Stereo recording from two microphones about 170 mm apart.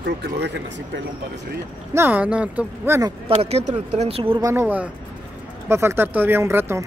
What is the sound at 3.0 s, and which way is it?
Speech, 30° right (ahead or behind).